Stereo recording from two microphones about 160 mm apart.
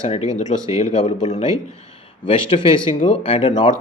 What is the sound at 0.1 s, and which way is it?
A man's voice, 45° left (ahead or behind).